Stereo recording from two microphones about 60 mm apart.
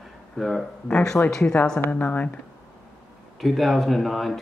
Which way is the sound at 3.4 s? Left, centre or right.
Centre.